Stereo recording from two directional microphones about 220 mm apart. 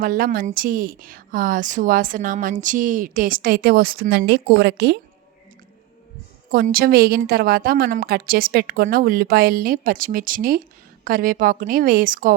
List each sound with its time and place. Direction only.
0.0 s a woman's voice: 40° right (ahead or behind)
6.5 s a woman's voice: 40° right (ahead or behind)